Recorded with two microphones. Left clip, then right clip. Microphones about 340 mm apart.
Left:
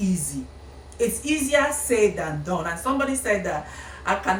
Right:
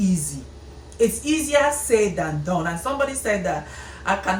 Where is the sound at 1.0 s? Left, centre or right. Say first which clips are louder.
Right 3 dB; centre.